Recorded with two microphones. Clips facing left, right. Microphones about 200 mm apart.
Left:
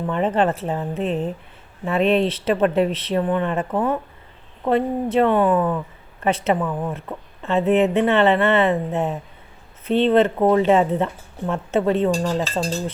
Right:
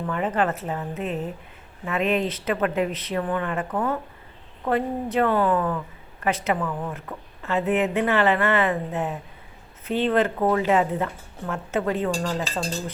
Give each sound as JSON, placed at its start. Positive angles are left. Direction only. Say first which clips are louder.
{"t": 0.1, "sound": "speech", "louder": "left 5 dB", "side_deg": 30}